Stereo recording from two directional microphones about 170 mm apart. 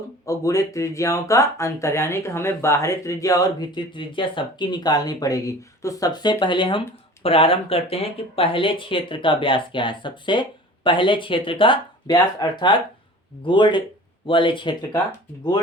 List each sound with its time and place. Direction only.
0.3 s speech: 20° left (ahead or behind)